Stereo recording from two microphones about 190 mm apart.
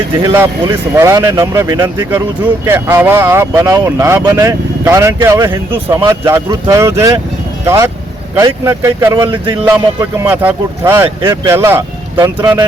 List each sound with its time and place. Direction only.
0.3 s speech: 15° right (ahead or behind)